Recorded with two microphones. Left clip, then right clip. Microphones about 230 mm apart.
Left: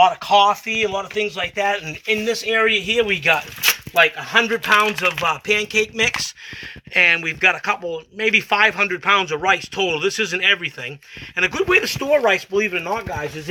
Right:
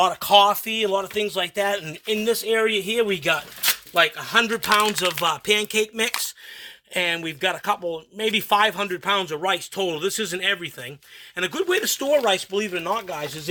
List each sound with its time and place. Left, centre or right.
0.0 s a man's voice: right; by 13.1 s centre